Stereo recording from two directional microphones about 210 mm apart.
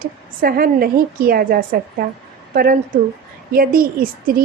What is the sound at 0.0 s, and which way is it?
A woman's voice, 45° right (ahead or behind).